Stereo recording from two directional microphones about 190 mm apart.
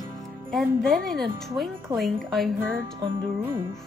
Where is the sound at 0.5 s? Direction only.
Centre (ahead or behind).